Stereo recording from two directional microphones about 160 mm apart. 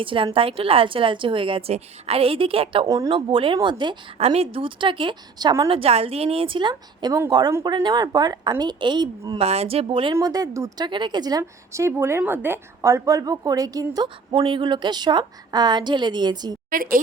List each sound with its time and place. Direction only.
0.0 s a woman's voice: 30° right (ahead or behind)
4.2 s a woman's voice: 40° right (ahead or behind)
9.4 s a woman's voice: 40° right (ahead or behind)
16.6 s a woman's voice: 60° right (ahead or behind)